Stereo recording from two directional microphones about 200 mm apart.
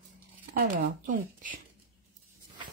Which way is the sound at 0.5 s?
45° right (ahead or behind).